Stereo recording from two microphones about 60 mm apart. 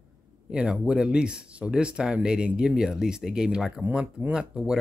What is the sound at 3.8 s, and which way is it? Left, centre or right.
Speech, right.